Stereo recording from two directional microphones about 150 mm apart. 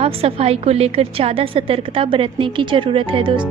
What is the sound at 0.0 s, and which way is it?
Speech, 40° right (ahead or behind).